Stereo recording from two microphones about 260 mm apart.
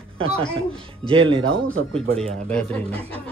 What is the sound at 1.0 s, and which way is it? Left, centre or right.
Speech, centre.